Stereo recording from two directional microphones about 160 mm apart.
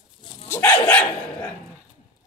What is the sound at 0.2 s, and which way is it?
Dog, 30° left (ahead or behind).